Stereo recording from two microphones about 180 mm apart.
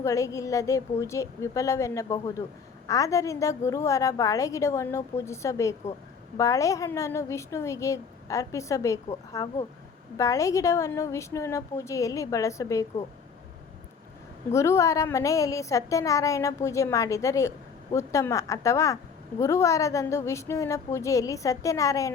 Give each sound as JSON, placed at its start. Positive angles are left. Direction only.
{"t": 0.0, "sound": "a woman's voice", "side_deg": 15}
{"t": 14.5, "sound": "a woman's voice", "side_deg": 15}